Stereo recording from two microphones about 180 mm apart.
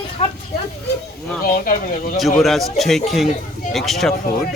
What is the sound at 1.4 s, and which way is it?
Speech, 55° left (ahead or behind).